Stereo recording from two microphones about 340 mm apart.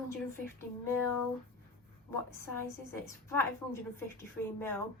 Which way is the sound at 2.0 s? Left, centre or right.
Centre.